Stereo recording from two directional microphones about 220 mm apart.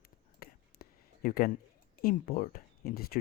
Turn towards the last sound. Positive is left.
turn(degrees=45)  # may be behind; listen again after turning